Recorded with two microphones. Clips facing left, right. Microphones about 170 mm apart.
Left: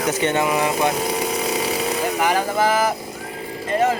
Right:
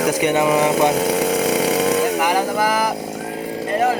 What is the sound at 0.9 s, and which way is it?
Chainsaw, 70° right (ahead or behind).